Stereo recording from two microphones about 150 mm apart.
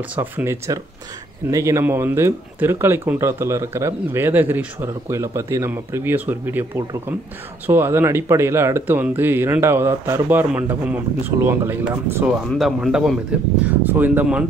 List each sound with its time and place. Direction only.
0.1 s speech: 15° right (ahead or behind)
7.6 s speech: 15° right (ahead or behind)
12.3 s speech: centre (ahead or behind)
13.7 s speech: 10° right (ahead or behind)